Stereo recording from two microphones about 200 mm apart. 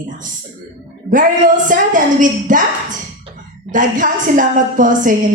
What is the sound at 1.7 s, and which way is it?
Speech, 40° right (ahead or behind).